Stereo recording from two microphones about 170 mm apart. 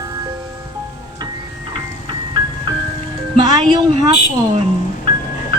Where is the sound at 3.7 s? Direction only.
25° right (ahead or behind).